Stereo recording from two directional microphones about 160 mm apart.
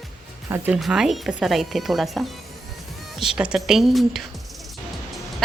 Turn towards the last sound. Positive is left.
turn(degrees=0)  # may be behind; listen again after turning